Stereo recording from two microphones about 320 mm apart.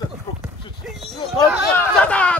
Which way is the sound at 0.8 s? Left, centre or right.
Centre.